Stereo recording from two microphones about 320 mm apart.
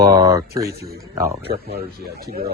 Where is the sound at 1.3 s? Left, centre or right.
Right.